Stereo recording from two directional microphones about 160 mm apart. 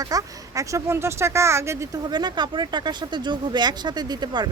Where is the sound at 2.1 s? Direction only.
25° right (ahead or behind).